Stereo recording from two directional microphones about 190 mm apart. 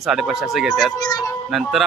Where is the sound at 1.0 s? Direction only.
20° left (ahead or behind).